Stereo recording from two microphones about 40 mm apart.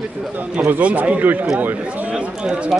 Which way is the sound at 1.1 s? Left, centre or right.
Right.